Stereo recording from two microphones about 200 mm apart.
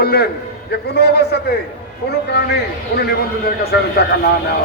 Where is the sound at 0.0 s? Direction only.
50° left (ahead or behind).